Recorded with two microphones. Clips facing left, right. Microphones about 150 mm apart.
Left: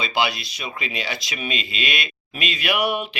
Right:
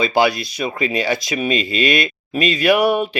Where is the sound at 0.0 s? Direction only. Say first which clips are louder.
Right 7 dB; 45° right (ahead or behind).